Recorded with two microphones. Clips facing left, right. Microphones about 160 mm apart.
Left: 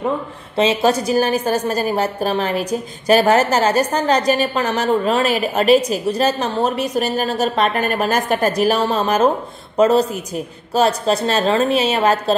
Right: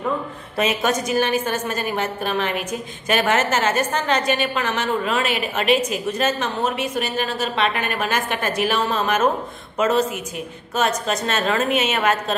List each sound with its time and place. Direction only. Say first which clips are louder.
0.6 s a woman's voice: left 5 dB; 30° left (ahead or behind)